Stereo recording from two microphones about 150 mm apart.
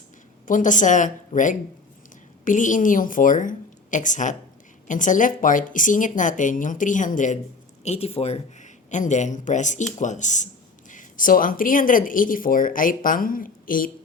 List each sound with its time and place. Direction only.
0.4 s speech: 60° left (ahead or behind)
7.9 s speech: 40° left (ahead or behind); by 13.9 s 65° left (ahead or behind)